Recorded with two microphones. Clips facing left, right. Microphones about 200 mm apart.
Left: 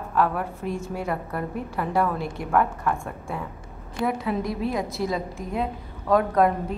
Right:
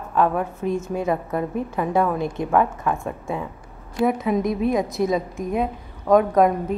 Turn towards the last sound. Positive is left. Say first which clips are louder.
# right 3 dB
turn(degrees=-20)  # may be behind; listen again after turning